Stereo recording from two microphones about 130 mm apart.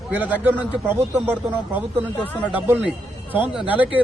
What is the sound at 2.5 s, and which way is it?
A man's voice, 10° right (ahead or behind).